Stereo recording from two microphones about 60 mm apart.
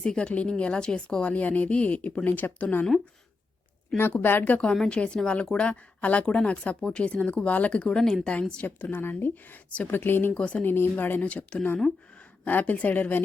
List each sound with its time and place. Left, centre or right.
0.0 s speech: centre
4.2 s speech: left
4.7 s a woman's voice: centre
8.0 s a woman's voice: centre
8.3 s a woman's voice: centre
8.6 s speech: left
10.3 s speech: left
10.6 s speech: left
11.5 s a woman's voice: centre
12.5 s speech: left